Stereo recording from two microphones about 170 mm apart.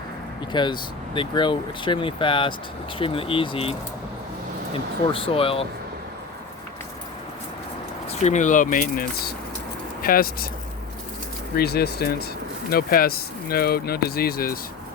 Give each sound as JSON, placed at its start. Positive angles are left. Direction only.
{"t": 0.5, "sound": "speech", "side_deg": 25}
{"t": 5.1, "sound": "speech", "side_deg": 35}
{"t": 8.1, "sound": "speech", "side_deg": 45}
{"t": 11.5, "sound": "speech", "side_deg": 70}